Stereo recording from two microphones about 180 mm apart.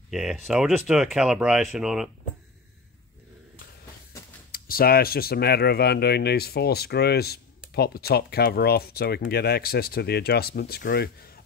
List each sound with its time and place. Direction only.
0.1 s speech: centre (ahead or behind)
4.5 s speech: 55° left (ahead or behind)